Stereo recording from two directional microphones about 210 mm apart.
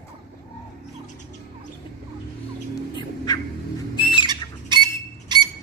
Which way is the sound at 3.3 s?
20° left (ahead or behind).